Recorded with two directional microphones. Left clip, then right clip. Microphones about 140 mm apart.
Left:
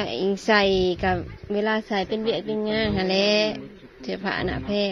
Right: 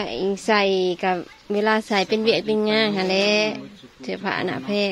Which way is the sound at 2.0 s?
50° right (ahead or behind).